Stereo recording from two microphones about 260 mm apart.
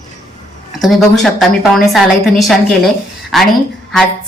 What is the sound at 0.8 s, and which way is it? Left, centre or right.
A woman's voice, centre.